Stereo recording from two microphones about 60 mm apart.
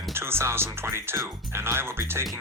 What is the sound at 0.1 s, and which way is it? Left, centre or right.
Speech, right.